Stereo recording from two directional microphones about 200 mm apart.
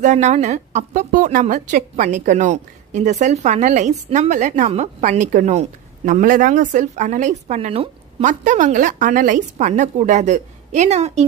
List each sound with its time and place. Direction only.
0.0 s a woman's voice: 35° right (ahead or behind)